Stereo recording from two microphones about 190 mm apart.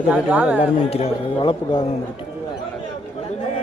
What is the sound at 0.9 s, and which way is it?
Speech, 30° left (ahead or behind).